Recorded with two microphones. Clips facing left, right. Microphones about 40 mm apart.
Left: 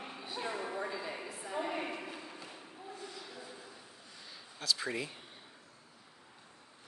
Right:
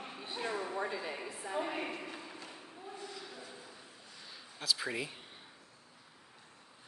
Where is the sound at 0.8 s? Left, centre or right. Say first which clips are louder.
Right 1 dB; centre.